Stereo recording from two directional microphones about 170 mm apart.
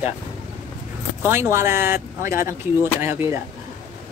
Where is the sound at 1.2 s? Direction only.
15° right (ahead or behind).